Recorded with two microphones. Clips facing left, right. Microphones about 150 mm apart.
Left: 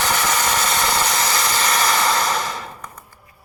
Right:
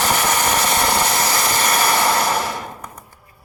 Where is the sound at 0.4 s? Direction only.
60° right (ahead or behind).